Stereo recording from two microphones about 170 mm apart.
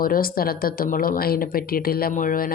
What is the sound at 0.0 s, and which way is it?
Speech, 60° left (ahead or behind).